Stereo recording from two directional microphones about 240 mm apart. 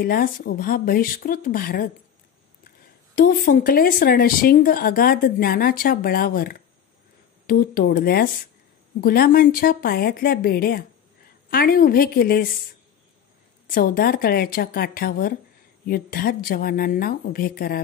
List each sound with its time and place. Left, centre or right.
0.0 s speech: left
3.2 s speech: left
13.7 s speech: left